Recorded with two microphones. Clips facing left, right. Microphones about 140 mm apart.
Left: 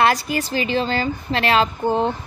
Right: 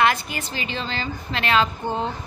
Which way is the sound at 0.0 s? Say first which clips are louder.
Left 3 dB; 35° left (ahead or behind).